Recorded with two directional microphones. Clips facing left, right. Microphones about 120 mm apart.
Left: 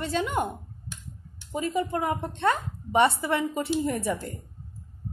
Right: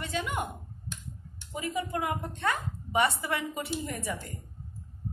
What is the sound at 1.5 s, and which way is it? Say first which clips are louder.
A woman's voice: left 5 dB; 30° left (ahead or behind).